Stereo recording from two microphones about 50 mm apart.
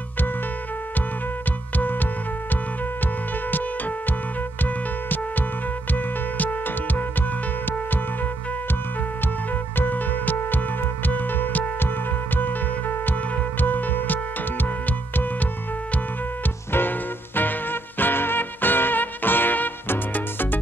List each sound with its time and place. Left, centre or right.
1.8 s music: left
4.6 s music: left
9.8 s music: left
17.4 s music: left